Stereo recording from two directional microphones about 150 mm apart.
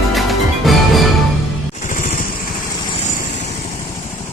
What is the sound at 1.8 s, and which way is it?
Music, 60° left (ahead or behind).